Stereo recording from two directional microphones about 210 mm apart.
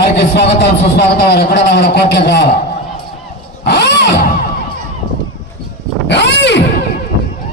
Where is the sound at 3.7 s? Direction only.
55° left (ahead or behind).